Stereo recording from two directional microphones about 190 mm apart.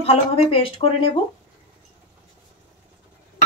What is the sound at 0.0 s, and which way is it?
Speech, 30° left (ahead or behind).